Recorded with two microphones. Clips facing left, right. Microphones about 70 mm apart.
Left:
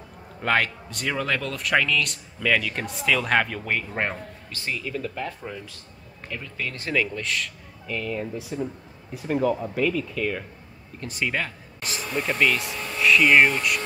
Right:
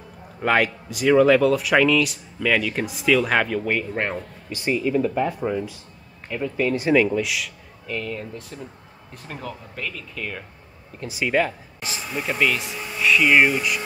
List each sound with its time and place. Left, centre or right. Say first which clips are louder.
0.4 s speech: right 3 dB; centre
4.5 s speech: right 9 dB; centre